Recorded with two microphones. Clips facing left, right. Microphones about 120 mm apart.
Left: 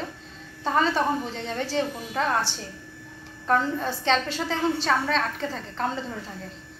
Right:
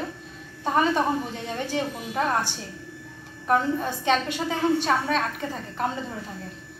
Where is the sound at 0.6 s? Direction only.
10° right (ahead or behind).